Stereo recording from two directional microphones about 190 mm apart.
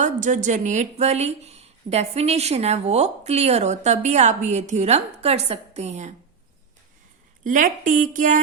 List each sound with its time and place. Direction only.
0.0 s a woman's voice: 40° right (ahead or behind)
7.4 s speech: 45° right (ahead or behind)